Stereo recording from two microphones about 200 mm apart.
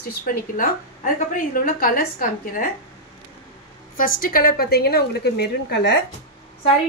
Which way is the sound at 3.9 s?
45° left (ahead or behind).